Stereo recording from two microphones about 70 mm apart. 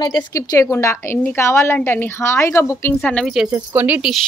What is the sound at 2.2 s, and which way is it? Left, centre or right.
Speech, left.